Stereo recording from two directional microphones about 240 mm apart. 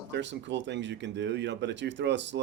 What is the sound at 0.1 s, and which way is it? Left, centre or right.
Speech, right.